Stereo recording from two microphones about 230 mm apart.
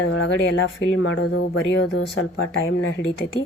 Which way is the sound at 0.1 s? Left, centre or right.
Left.